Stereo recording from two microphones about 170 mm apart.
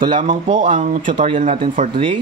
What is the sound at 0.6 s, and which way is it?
A man's voice, 50° right (ahead or behind).